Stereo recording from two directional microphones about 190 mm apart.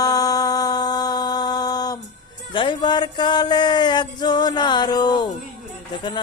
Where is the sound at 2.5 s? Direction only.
25° left (ahead or behind).